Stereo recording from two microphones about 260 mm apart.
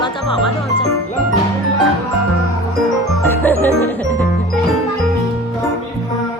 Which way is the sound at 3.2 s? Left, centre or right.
Centre.